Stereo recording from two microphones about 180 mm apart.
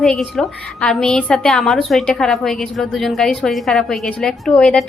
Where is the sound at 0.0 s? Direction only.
5° left (ahead or behind).